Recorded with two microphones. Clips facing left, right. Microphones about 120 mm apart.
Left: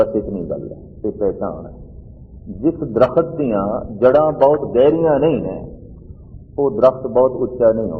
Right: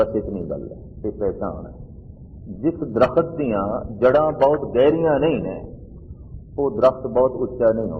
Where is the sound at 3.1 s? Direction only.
5° left (ahead or behind).